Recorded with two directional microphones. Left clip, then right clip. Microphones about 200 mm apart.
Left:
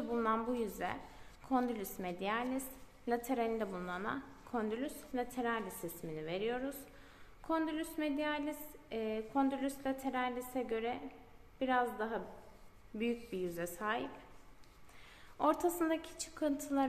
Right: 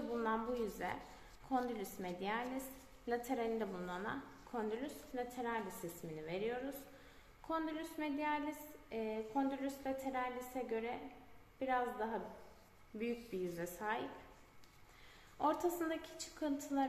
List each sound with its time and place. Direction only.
0.1 s a woman's voice: 35° left (ahead or behind)
15.3 s a woman's voice: 40° left (ahead or behind)